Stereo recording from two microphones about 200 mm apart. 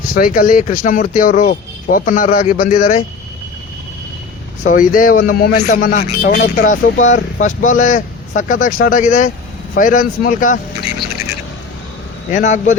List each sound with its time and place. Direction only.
0.1 s speech: 45° left (ahead or behind)
4.6 s a man's voice: 40° left (ahead or behind)
12.3 s speech: 40° left (ahead or behind)